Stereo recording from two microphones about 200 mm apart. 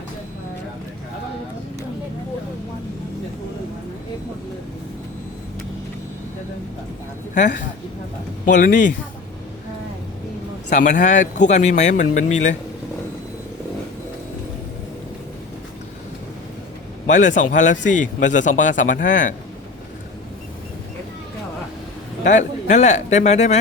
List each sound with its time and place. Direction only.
7.3 s a man's voice: 40° left (ahead or behind)
10.7 s a man's voice: 40° left (ahead or behind)
17.1 s a man's voice: 40° left (ahead or behind)
22.2 s a man's voice: 40° left (ahead or behind)